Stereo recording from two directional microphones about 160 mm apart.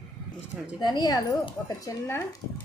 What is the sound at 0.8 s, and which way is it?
Speech, 25° left (ahead or behind).